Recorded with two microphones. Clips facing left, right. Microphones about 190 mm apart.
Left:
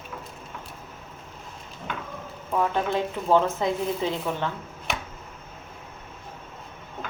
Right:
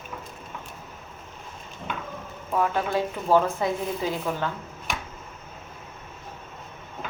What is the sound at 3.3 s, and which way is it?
A woman's voice, 20° left (ahead or behind).